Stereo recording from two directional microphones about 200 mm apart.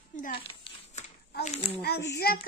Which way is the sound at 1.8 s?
50° left (ahead or behind).